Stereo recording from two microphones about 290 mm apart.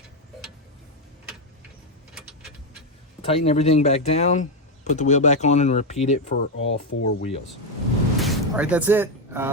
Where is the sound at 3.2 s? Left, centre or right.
Centre.